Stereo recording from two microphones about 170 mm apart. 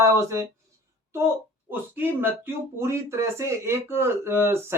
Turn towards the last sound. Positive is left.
turn(degrees=-15)  # may be behind; listen again after turning